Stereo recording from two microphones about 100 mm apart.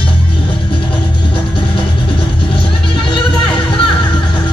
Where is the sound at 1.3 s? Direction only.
60° left (ahead or behind).